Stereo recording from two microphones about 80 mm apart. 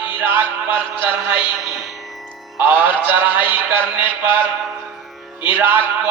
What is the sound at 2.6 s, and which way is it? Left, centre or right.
Music, right.